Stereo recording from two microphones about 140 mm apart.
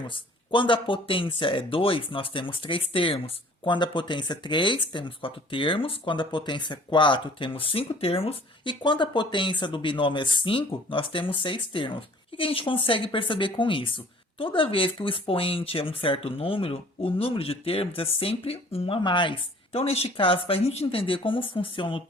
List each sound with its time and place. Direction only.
0.1 s speech: 35° left (ahead or behind)